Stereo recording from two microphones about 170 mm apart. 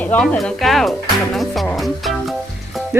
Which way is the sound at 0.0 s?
10° left (ahead or behind).